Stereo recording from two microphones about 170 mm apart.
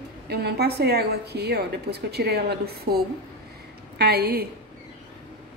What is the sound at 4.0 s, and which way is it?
Speech, 70° right (ahead or behind).